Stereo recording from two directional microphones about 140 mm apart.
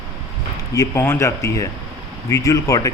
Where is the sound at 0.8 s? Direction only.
15° left (ahead or behind).